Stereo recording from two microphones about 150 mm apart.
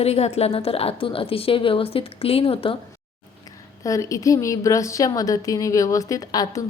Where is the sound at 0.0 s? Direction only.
45° left (ahead or behind).